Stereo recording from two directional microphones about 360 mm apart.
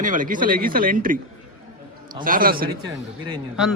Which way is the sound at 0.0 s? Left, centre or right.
Right.